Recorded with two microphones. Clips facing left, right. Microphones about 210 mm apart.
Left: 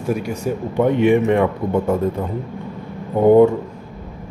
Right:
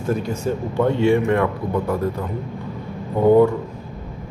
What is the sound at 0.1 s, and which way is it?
A man's voice, 10° left (ahead or behind).